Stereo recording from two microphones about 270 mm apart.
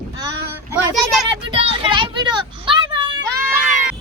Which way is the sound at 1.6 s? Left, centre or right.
Centre.